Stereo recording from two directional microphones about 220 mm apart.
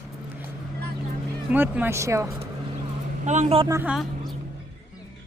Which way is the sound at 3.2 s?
35° right (ahead or behind).